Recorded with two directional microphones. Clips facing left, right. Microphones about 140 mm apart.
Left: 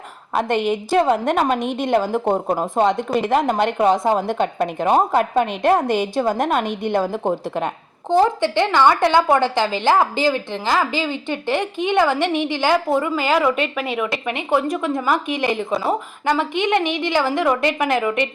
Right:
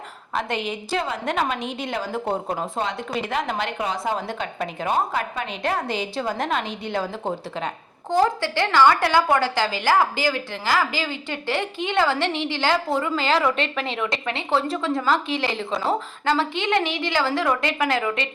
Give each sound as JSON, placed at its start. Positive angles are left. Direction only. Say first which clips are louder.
{"t": 0.3, "sound": "a woman's voice", "louder": "left 7 dB", "side_deg": 50}
{"t": 8.1, "sound": "a woman's voice", "louder": "left 4 dB", "side_deg": 20}